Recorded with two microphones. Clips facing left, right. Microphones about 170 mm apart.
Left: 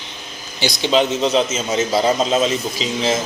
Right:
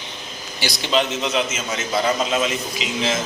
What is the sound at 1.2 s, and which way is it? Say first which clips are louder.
A man's voice: left 5 dB; 30° left (ahead or behind).